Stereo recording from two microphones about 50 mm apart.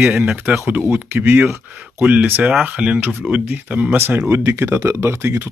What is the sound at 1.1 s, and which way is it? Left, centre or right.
Speech, right.